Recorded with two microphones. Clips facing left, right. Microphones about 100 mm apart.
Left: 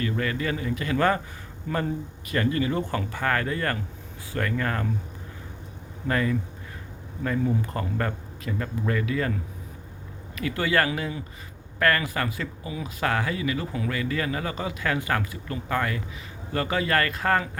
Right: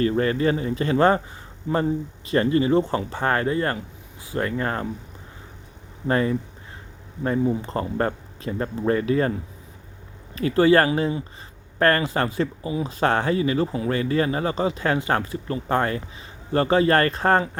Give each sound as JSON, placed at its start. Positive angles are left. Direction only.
{"t": 0.0, "sound": "speech", "side_deg": -30}
{"t": 6.1, "sound": "speech", "side_deg": -30}